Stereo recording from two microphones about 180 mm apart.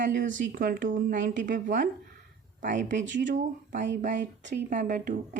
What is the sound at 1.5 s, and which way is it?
A woman's voice, 50° right (ahead or behind).